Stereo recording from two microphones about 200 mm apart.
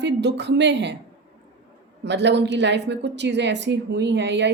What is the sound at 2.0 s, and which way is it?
A woman's voice, 60° right (ahead or behind).